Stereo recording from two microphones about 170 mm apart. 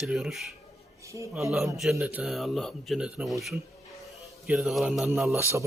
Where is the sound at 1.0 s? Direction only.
15° right (ahead or behind).